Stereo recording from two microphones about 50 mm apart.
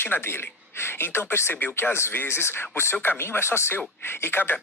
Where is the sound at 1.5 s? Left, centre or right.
Left.